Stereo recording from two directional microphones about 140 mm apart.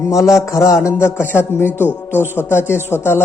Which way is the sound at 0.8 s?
15° left (ahead or behind).